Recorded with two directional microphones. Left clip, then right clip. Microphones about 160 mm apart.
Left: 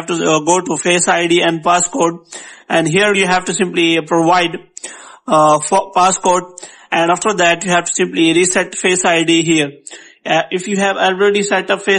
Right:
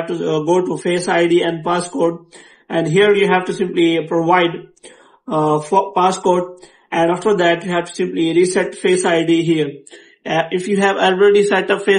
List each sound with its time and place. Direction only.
0.2 s speech: 50° left (ahead or behind)
5.9 s speech: 50° left (ahead or behind)
10.2 s a man's voice: 30° left (ahead or behind)